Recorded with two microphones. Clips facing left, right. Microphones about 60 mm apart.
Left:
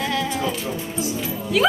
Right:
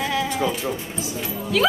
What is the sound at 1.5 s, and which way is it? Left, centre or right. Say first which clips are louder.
Speech: left 1 dB; centre.